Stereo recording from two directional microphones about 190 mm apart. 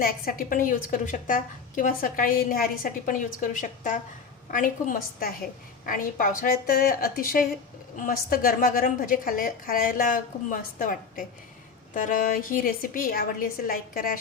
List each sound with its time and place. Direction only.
0.0 s a woman's voice: 50° left (ahead or behind)